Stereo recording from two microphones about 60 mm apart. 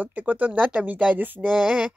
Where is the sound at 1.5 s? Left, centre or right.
Centre.